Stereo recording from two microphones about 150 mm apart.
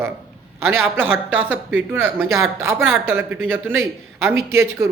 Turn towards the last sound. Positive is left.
turn(degrees=-15)  # may be behind; listen again after turning